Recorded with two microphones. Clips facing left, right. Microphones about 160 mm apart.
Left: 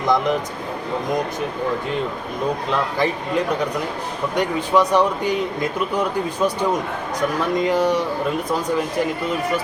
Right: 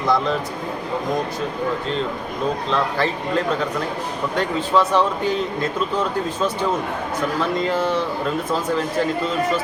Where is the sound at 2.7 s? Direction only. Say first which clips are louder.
Even; 15° left (ahead or behind).